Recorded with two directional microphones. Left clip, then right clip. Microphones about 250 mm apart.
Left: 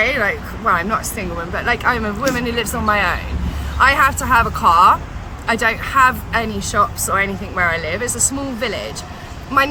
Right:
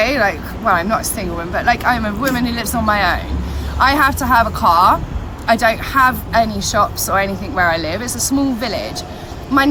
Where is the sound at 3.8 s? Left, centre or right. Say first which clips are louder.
Even; left.